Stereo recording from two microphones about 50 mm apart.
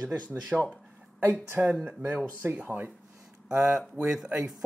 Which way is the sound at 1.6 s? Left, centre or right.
Right.